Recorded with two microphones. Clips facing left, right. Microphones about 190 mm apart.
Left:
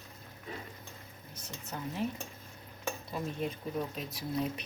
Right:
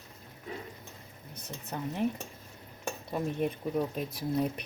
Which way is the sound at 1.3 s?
60° right (ahead or behind).